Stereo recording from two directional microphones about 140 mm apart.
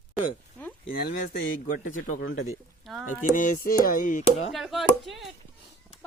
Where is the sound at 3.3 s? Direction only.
80° left.